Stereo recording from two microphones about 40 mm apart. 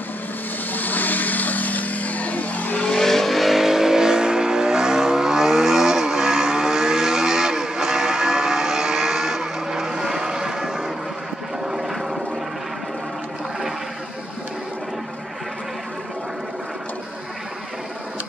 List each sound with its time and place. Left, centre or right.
0.7 s vehicle: left
2.9 s vehicle: centre